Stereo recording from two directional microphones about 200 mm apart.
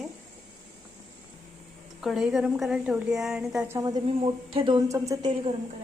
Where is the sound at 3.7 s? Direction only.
20° right (ahead or behind).